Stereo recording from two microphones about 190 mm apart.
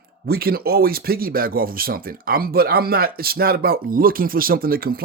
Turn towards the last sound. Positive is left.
turn(degrees=-50)  # may be behind; listen again after turning